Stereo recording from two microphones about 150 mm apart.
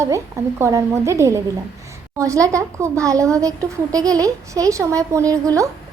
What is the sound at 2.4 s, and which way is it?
Speech, 20° right (ahead or behind).